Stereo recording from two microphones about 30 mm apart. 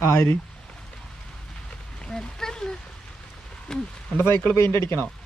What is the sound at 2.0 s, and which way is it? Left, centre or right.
Speech, centre.